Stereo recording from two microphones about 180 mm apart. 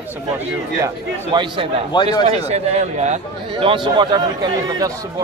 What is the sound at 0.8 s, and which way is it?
Speech, 25° right (ahead or behind).